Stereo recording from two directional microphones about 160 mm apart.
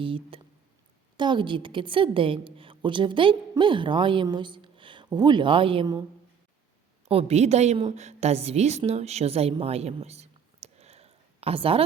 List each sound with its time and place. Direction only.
0.0 s a woman's voice: 35° right (ahead or behind)
7.1 s a woman's voice: 40° right (ahead or behind)